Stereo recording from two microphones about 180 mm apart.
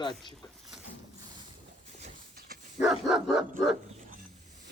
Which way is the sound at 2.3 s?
60° right (ahead or behind).